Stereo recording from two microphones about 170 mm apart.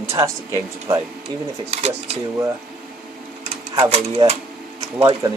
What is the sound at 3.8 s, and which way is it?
Speech, 40° right (ahead or behind).